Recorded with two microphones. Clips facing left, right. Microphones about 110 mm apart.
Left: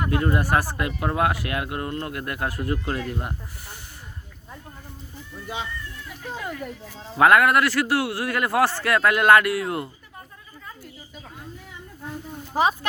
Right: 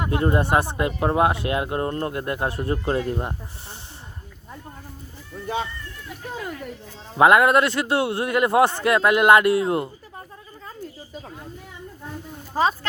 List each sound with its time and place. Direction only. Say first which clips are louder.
0.0 s speech: right 2 dB; 25° right (ahead or behind)
7.2 s speech: right 2 dB; 25° right (ahead or behind)
12.5 s speech: even; 15° left (ahead or behind)